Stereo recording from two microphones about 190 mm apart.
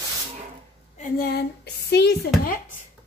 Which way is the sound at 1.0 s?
50° left (ahead or behind).